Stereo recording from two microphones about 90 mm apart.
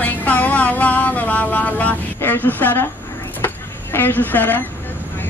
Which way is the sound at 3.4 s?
20° left (ahead or behind).